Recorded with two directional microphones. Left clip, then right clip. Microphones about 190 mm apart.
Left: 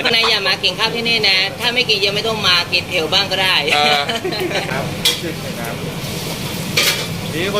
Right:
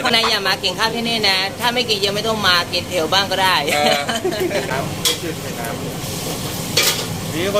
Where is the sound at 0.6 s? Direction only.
20° right (ahead or behind).